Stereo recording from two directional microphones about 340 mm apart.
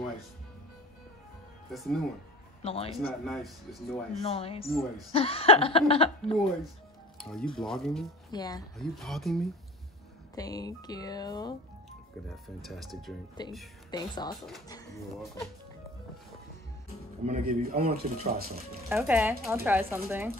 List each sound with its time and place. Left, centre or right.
1.7 s speech: centre
2.6 s speech: centre
3.3 s speech: centre
4.2 s speech: centre
7.2 s music: centre
7.5 s speech: centre
8.3 s speech: centre
8.7 s speech: centre
10.3 s speech: centre
12.3 s speech: centre
13.4 s speech: centre
17.2 s speech: right
18.9 s speech: centre